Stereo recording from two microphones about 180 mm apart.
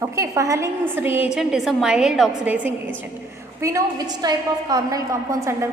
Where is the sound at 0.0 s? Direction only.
15° right (ahead or behind).